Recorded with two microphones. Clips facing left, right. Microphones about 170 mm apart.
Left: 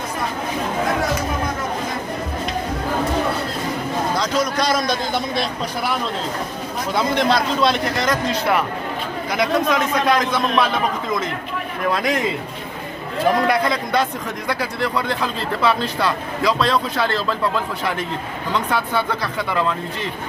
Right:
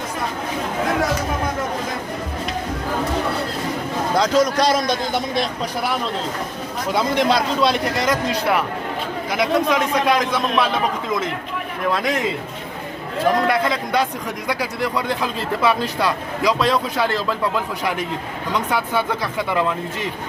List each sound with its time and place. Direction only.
4.2 s a man's voice: 40° right (ahead or behind); by 5.2 s 20° right (ahead or behind)
6.9 s a man's voice: 5° right (ahead or behind)
13.5 s a man's voice: 5° right (ahead or behind)